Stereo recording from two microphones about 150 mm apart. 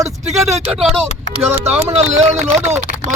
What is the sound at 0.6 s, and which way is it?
Speech, 5° right (ahead or behind).